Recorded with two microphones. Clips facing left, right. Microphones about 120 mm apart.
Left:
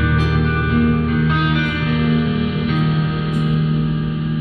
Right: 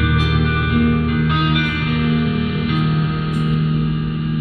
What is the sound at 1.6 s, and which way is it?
Music, 15° left (ahead or behind).